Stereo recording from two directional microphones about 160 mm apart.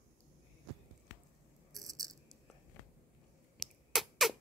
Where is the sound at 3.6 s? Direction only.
Centre (ahead or behind).